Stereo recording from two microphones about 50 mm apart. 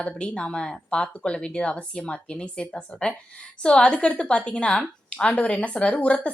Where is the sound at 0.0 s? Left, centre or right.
Left.